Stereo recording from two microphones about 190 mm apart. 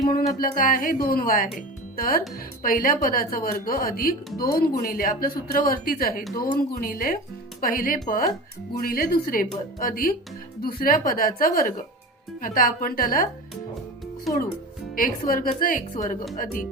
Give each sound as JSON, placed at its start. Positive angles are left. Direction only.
{"t": 0.3, "sound": "a woman's voice", "side_deg": 50}
{"t": 14.9, "sound": "a woman's voice", "side_deg": 45}